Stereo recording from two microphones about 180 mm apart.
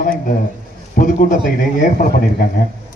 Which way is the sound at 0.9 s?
45° left (ahead or behind).